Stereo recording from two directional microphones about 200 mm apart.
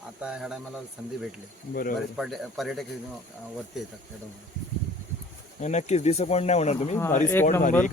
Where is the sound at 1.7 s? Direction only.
45° left (ahead or behind).